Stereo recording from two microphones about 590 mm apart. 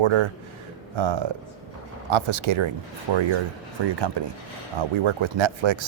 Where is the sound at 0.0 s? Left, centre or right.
Right.